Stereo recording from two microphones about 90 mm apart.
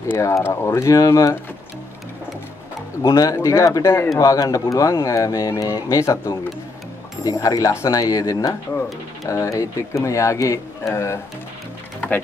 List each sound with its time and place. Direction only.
0.1 s speech: 30° left (ahead or behind)
3.1 s speech: 40° left (ahead or behind)